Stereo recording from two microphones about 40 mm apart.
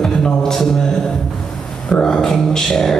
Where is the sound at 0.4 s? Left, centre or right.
Centre.